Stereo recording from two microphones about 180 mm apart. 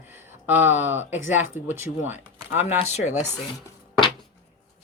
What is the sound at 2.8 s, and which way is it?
Speech, 35° left (ahead or behind).